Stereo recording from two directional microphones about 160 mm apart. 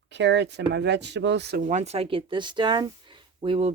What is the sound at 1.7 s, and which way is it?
Speech, 45° right (ahead or behind).